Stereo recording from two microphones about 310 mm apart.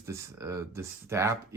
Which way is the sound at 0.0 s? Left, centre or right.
Centre.